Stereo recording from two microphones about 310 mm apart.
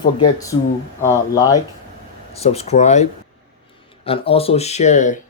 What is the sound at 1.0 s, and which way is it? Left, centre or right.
Speech, centre.